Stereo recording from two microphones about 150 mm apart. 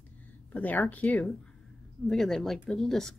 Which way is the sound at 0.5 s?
10° left (ahead or behind).